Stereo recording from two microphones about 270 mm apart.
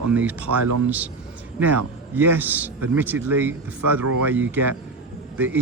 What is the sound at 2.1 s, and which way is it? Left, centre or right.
A man's voice, centre.